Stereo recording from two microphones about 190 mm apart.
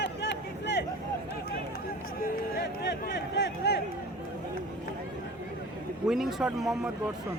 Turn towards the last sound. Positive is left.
turn(degrees=0)  # may be behind; listen again after turning